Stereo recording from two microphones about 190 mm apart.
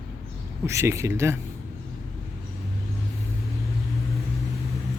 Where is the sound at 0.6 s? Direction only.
15° right (ahead or behind).